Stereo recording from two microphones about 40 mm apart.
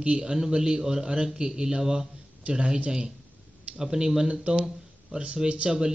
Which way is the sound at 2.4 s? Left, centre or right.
Right.